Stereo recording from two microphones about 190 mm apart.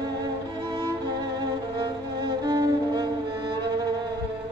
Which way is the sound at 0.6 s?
20° right (ahead or behind).